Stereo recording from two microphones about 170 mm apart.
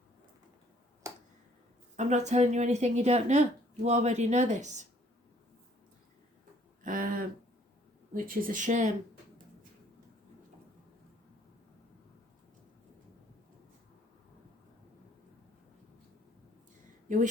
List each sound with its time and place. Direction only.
1.0 s tick-tock: 20° right (ahead or behind)
2.0 s a woman's voice: 45° right (ahead or behind)
6.8 s a sound: 55° right (ahead or behind)
8.1 s speech: 55° right (ahead or behind)
17.1 s speech: 50° right (ahead or behind)